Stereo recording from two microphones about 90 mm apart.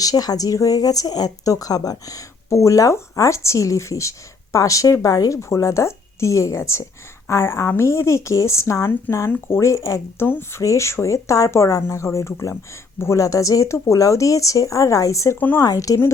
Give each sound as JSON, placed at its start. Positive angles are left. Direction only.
{"t": 0.0, "sound": "speech", "side_deg": 45}
{"t": 15.4, "sound": "speech", "side_deg": 20}
{"t": 15.6, "sound": "speech", "side_deg": 40}